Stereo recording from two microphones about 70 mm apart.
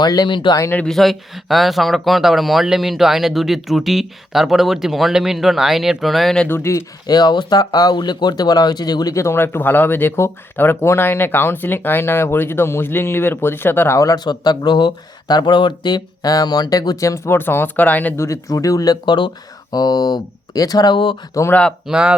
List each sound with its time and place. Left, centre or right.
0.0 s speech: left
0.9 s speech: centre
6.5 s speech: left
7.1 s speech: left
9.1 s speech: left
14.3 s speech: left
17.3 s speech: left
18.2 s speech: left
19.7 s speech: left
21.4 s speech: left
21.8 s speech: centre